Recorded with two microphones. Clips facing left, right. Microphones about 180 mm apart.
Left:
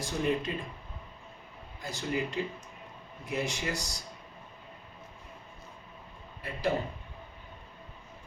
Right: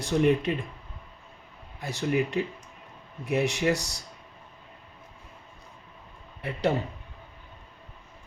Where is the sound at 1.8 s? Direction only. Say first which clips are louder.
Right 6 dB; 65° right (ahead or behind).